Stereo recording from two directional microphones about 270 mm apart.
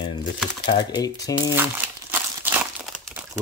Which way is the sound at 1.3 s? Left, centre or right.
Centre.